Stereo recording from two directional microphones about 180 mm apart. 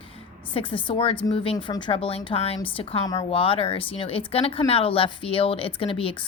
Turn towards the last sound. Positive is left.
turn(degrees=30)  # may be behind; listen again after turning